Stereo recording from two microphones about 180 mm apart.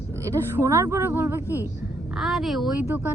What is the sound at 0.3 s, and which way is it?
A woman's voice, 15° right (ahead or behind).